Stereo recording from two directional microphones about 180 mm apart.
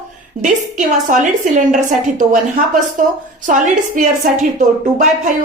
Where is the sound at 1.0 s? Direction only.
45° right (ahead or behind).